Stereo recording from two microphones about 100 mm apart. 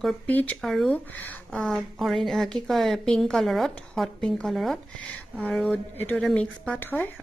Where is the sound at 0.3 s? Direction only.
20° left (ahead or behind).